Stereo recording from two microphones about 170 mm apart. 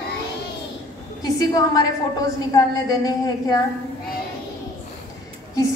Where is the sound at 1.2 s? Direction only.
20° left (ahead or behind).